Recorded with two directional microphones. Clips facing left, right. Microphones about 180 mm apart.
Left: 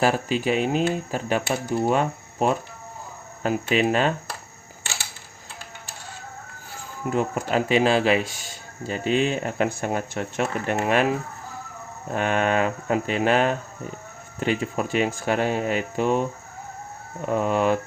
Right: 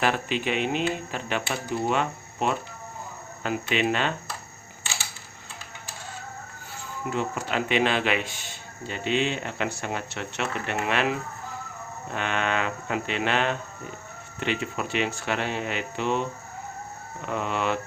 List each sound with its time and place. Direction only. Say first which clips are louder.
0.0 s speech: left 4 dB; 40° left (ahead or behind)
7.1 s speech: left 5 dB; 45° left (ahead or behind)